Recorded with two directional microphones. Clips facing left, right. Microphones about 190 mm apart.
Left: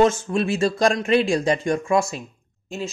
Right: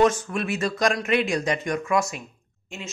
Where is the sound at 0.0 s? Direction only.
25° left (ahead or behind).